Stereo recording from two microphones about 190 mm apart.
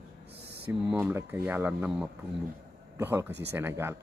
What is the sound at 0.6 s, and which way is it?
Speech, 10° right (ahead or behind).